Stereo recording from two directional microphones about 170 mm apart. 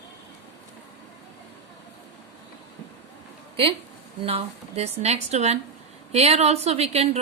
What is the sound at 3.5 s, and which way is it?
A woman's voice, 35° right (ahead or behind).